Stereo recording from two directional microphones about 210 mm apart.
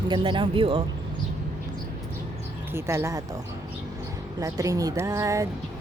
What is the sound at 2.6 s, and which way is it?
A woman's voice, 10° right (ahead or behind).